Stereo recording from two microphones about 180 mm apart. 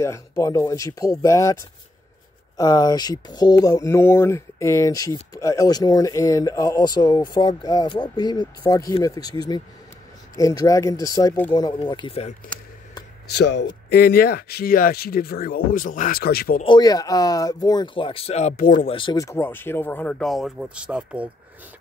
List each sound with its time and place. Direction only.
0.0 s speech: 15° left (ahead or behind); by 12.4 s 35° left (ahead or behind)
13.3 s speech: 70° left (ahead or behind)
13.8 s speech: 60° left (ahead or behind)
16.6 s speech: 25° left (ahead or behind); by 18.7 s 40° left (ahead or behind)
18.9 s speech: 30° left (ahead or behind)
19.2 s speech: 10° left (ahead or behind); by 21.3 s 5° right (ahead or behind)